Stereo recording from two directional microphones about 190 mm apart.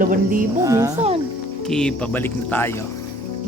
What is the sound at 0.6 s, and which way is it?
Speech, 15° right (ahead or behind).